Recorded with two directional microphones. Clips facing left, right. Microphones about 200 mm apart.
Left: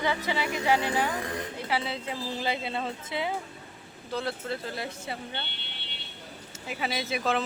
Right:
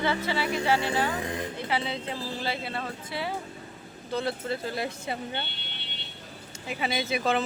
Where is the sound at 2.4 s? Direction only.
20° left (ahead or behind).